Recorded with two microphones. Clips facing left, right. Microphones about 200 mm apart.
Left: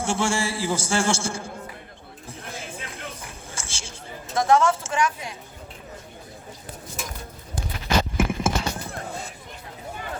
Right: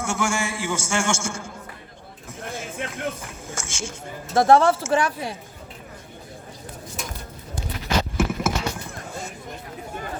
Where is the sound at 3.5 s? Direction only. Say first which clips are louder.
Right 10 dB; 35° left (ahead or behind).